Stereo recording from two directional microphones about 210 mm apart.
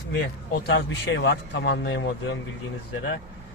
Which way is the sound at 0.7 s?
55° left (ahead or behind).